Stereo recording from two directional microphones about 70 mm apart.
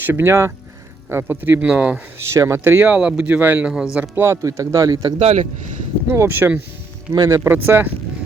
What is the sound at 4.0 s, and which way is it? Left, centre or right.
Speech, right.